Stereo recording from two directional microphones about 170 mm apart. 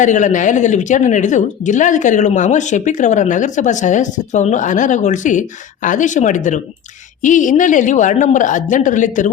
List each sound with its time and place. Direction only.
0.0 s a woman's voice: 45° left (ahead or behind)